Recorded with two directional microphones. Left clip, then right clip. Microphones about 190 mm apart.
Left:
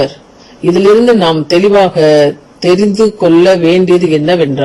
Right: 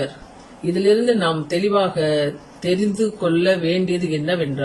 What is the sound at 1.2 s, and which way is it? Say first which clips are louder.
Speech: left 11 dB; 30° left (ahead or behind).